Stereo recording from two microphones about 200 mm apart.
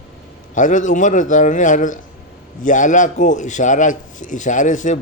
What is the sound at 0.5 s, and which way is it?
Speech, 40° left (ahead or behind).